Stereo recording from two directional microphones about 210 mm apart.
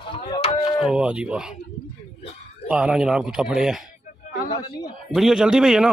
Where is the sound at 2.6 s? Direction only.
5° right (ahead or behind).